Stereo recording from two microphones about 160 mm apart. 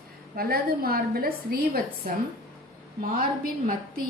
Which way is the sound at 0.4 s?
70° right (ahead or behind).